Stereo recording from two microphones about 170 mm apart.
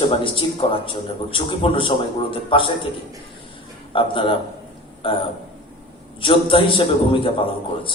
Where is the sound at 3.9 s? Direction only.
30° left (ahead or behind).